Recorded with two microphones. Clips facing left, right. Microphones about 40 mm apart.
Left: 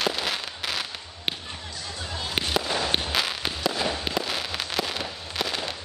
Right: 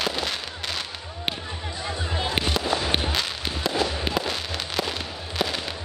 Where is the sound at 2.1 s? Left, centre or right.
Right.